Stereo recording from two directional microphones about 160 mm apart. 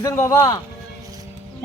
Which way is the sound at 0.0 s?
20° left (ahead or behind).